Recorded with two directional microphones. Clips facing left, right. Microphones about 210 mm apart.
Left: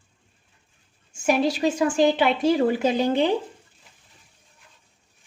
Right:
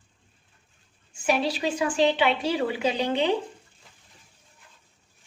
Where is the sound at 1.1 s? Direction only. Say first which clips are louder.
Left 4 dB; 45° left (ahead or behind).